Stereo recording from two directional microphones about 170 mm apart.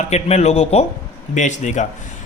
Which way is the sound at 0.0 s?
40° left (ahead or behind).